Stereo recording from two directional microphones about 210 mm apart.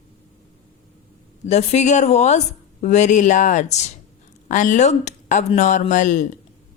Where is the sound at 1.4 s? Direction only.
30° left (ahead or behind).